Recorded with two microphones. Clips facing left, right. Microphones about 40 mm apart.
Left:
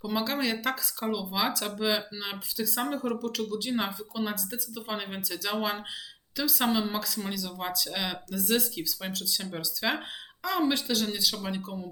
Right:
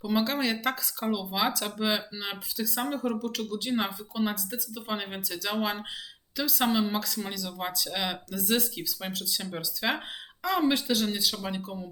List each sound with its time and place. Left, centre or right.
0.0 s speech: centre